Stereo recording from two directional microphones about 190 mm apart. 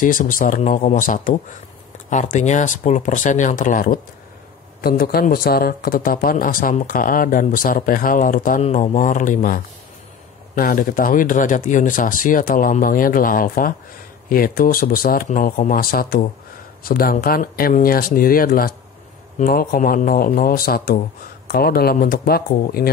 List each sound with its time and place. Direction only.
0.0 s speech: 45° left (ahead or behind)